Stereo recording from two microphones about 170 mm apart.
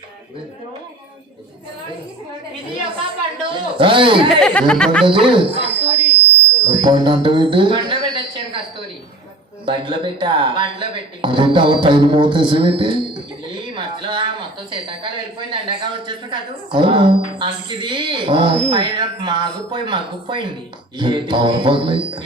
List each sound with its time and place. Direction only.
3.5 s speech: 30° right (ahead or behind)
4.3 s speech: 5° left (ahead or behind)
5.0 s speech: 30° right (ahead or behind)
6.7 s a sound: 25° right (ahead or behind)
9.6 s speech: 30° right (ahead or behind)